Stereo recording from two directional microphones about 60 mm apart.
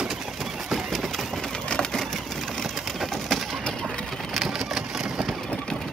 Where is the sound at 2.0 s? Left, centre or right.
Centre.